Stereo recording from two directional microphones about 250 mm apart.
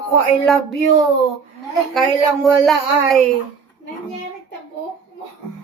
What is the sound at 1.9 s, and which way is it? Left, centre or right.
Child singing, centre.